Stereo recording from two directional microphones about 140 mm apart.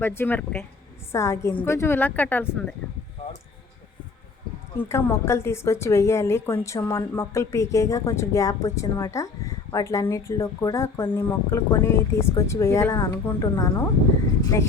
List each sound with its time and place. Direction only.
0.0 s speech: 15° left (ahead or behind)
4.8 s speech: 15° left (ahead or behind)